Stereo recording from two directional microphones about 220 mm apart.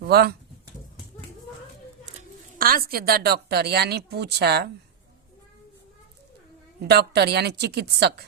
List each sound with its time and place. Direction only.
0.0 s speech: 45° right (ahead or behind)
2.6 s a woman's voice: 40° right (ahead or behind)
6.8 s a woman's voice: 50° right (ahead or behind)